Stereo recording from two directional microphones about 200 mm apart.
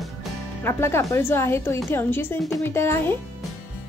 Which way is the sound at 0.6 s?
10° left (ahead or behind).